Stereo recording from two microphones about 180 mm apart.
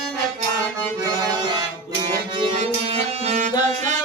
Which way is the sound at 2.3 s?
35° right (ahead or behind).